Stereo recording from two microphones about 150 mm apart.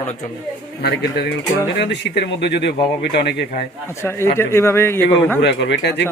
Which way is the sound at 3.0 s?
90° left.